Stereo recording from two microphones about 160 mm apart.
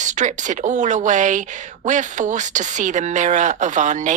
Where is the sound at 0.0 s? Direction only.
50° right (ahead or behind).